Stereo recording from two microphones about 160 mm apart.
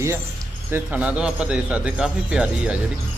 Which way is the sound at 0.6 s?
10° right (ahead or behind).